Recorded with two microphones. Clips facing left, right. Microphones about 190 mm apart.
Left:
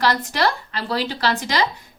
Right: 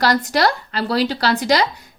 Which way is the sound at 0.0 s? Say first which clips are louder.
Right 3 dB; 40° right (ahead or behind).